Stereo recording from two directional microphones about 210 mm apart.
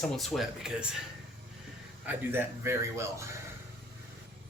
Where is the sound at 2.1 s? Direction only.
10° right (ahead or behind).